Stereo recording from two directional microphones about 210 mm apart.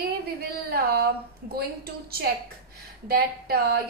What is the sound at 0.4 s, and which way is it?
A woman's voice, 50° right (ahead or behind).